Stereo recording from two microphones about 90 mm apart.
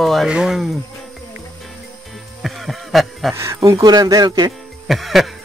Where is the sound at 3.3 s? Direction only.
30° right (ahead or behind).